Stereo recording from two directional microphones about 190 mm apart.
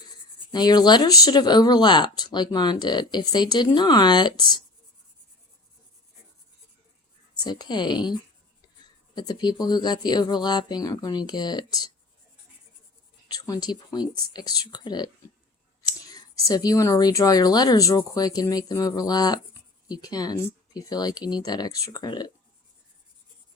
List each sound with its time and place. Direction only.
0.5 s speech: 20° left (ahead or behind)
7.3 s speech: 20° left (ahead or behind)
9.1 s speech: 20° left (ahead or behind)
13.2 s speech: 20° left (ahead or behind)
15.9 s whispering: 20° left (ahead or behind)
16.5 s speech: 20° left (ahead or behind)